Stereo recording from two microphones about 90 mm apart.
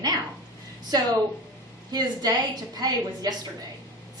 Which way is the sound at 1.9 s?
50° right (ahead or behind).